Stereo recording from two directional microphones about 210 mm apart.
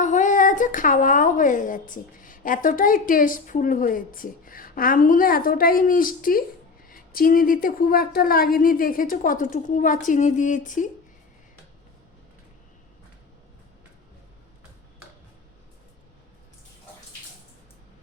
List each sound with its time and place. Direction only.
0.0 s a woman's voice: 35° left (ahead or behind)